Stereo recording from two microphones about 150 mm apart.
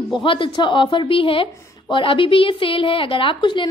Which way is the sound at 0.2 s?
35° left (ahead or behind).